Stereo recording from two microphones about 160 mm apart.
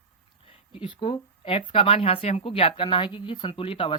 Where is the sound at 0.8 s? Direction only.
35° left (ahead or behind).